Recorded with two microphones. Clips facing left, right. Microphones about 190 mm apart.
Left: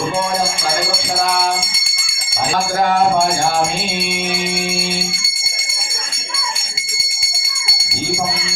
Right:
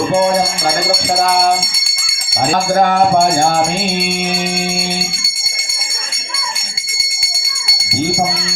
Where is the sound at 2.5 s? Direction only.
50° right (ahead or behind).